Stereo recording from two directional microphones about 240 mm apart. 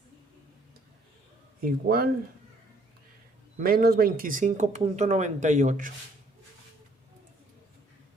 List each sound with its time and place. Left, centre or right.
1.6 s speech: right
3.6 s speech: right